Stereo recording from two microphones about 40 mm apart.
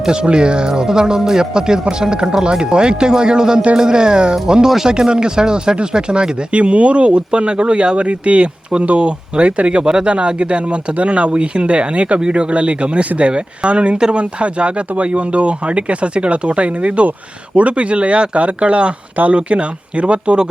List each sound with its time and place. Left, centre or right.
0.0 s speech: right
19.1 s speech: right
19.4 s speech: right